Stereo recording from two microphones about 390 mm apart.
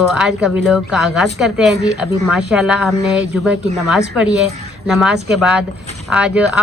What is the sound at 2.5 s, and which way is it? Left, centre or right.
Speech, centre.